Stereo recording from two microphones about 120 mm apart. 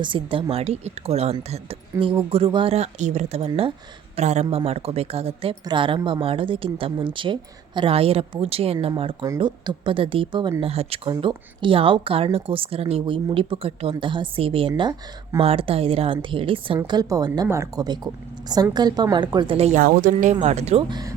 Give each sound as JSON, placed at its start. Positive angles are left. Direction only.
{"t": 0.0, "sound": "a woman's voice", "side_deg": -45}
{"t": 0.5, "sound": "speech", "side_deg": -60}
{"t": 4.2, "sound": "speech", "side_deg": -70}
{"t": 4.5, "sound": "speech", "side_deg": -55}
{"t": 5.6, "sound": "a woman's voice", "side_deg": -45}
{"t": 9.4, "sound": "a woman's voice", "side_deg": -45}
{"t": 10.6, "sound": "a woman's voice", "side_deg": -55}
{"t": 16.8, "sound": "a woman's voice", "side_deg": -35}
{"t": 17.8, "sound": "a woman's voice", "side_deg": -35}
{"t": 19.5, "sound": "speech", "side_deg": -60}